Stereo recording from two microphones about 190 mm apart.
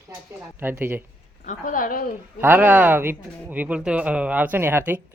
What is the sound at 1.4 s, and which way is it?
Speech, 45° left (ahead or behind).